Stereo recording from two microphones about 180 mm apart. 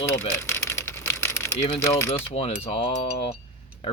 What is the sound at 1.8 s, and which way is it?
Speech, 15° left (ahead or behind).